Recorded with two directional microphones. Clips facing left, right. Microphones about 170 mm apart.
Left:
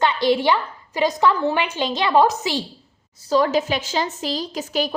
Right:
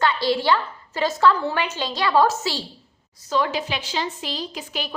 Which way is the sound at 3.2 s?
40° left (ahead or behind).